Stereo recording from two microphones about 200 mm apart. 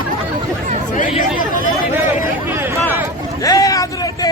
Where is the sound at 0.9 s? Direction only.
40° left (ahead or behind).